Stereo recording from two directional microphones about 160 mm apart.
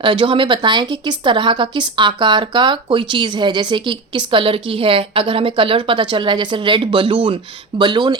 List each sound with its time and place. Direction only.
0.0 s speech: 30° right (ahead or behind)